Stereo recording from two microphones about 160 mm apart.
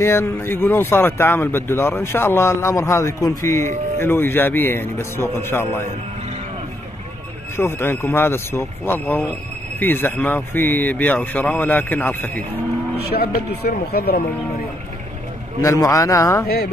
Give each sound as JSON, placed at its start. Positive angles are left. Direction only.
{"t": 0.0, "sound": "speech", "side_deg": 15}
{"t": 7.5, "sound": "speech", "side_deg": 15}
{"t": 13.1, "sound": "speech", "side_deg": 70}
{"t": 15.6, "sound": "a man's voice", "side_deg": 20}